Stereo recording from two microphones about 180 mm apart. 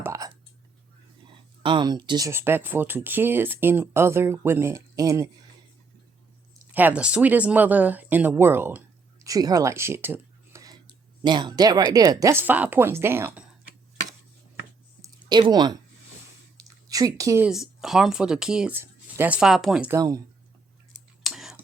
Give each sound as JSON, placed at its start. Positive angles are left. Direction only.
{"t": 0.0, "sound": "whispering", "side_deg": -20}
{"t": 1.6, "sound": "speech", "side_deg": -25}
{"t": 6.7, "sound": "speech", "side_deg": -10}
{"t": 15.0, "sound": "a sound", "side_deg": -25}
{"t": 17.5, "sound": "speech", "side_deg": 0}
{"t": 19.9, "sound": "speech", "side_deg": -20}
{"t": 21.2, "sound": "a sound", "side_deg": 0}